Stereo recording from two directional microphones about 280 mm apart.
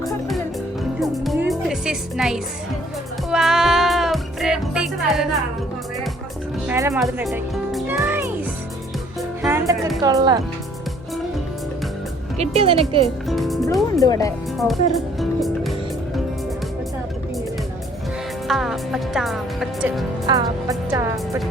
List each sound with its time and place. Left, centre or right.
0.0 s music: centre
6.7 s music: centre
9.4 s music: centre
10.0 s speech: centre
12.4 s speech: right
13.2 s speech: centre
14.0 s speech: centre
14.6 s music: centre
18.4 s speech: centre
20.2 s speech: centre